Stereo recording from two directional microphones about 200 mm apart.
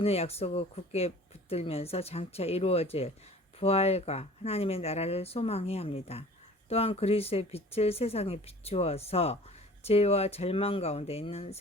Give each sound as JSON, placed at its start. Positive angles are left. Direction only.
{"t": 0.0, "sound": "speech", "side_deg": 30}